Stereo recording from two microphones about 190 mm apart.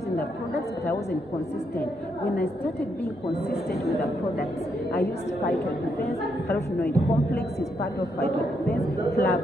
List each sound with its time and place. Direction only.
2.2 s a woman's voice: 60° left (ahead or behind)
4.9 s a woman's voice: 60° left (ahead or behind)
8.2 s a woman's voice: 55° left (ahead or behind)